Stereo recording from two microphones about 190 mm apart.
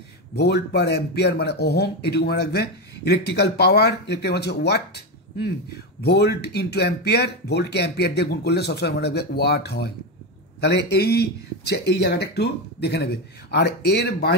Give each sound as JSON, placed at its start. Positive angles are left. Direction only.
{"t": 0.4, "sound": "speech", "side_deg": 60}